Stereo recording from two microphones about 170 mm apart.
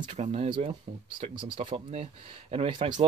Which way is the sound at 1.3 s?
30° right (ahead or behind).